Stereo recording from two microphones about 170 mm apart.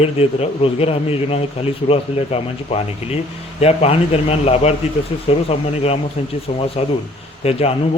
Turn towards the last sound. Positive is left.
turn(degrees=35)  # may be behind; listen again after turning